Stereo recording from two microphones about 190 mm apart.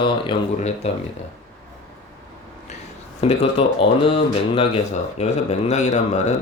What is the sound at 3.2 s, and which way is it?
Speech, 35° left (ahead or behind).